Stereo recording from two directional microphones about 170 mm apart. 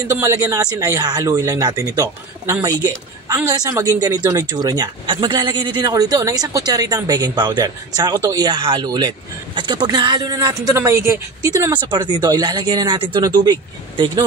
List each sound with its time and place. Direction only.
0.1 s speech: 20° right (ahead or behind)